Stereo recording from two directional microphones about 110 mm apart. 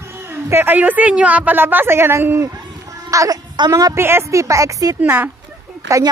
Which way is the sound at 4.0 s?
25° right (ahead or behind).